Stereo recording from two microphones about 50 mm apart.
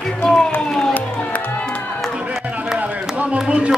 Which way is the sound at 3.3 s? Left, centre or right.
Right.